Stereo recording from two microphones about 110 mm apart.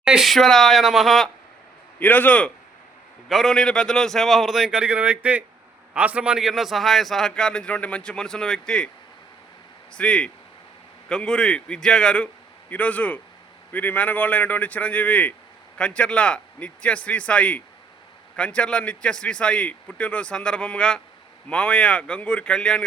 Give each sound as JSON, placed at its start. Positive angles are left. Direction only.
{"t": 0.0, "sound": "a man's voice", "side_deg": -5}
{"t": 2.0, "sound": "a man's voice", "side_deg": 15}
{"t": 3.2, "sound": "a man's voice", "side_deg": 0}
{"t": 10.0, "sound": "a man's voice", "side_deg": 10}